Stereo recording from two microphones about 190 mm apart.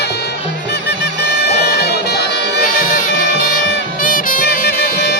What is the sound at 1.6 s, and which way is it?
Bagpipes, 60° left (ahead or behind).